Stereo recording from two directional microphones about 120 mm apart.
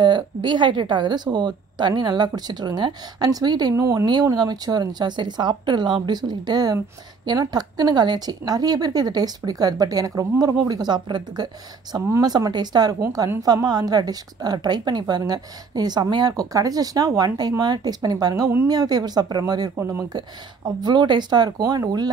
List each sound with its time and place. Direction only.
0.0 s a woman's voice: 40° right (ahead or behind)
19.8 s speech: 20° right (ahead or behind)
20.1 s a woman's voice: 35° right (ahead or behind)